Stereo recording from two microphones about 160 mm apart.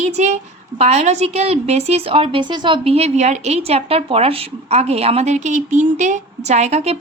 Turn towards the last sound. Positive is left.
turn(degrees=-45)  # may be behind; listen again after turning